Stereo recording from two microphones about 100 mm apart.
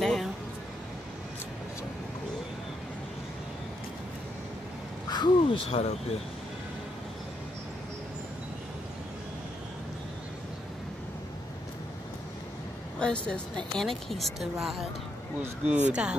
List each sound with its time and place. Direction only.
0.0 s music: centre (ahead or behind)
5.1 s speech: 45° left (ahead or behind)
5.7 s speech: 90° left
13.0 s a woman's voice: 10° left (ahead or behind); by 16.2 s 10° right (ahead or behind)